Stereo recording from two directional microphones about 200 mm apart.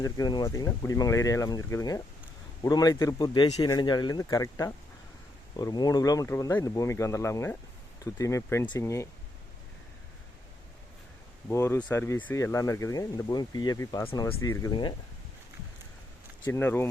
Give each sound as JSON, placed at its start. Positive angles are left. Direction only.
{"t": 0.0, "sound": "speech", "side_deg": 20}
{"t": 11.4, "sound": "speech", "side_deg": 15}
{"t": 16.4, "sound": "speech", "side_deg": 10}